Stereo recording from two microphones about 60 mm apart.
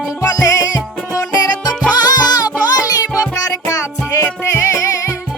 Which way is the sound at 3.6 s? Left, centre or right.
Left.